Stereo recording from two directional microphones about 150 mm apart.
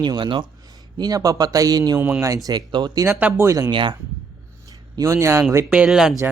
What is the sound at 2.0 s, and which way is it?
Speech, 10° right (ahead or behind).